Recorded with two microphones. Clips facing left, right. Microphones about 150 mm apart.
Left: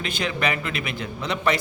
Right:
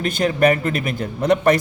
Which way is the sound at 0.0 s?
45° right (ahead or behind).